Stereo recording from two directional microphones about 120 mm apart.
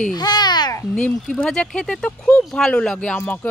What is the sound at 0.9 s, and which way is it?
Speech, 5° left (ahead or behind).